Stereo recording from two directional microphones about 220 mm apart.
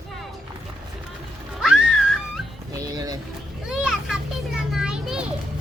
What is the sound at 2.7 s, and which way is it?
Speech, 15° right (ahead or behind).